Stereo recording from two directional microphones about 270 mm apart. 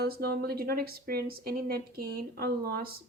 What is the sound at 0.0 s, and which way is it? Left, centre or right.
A woman's voice, right.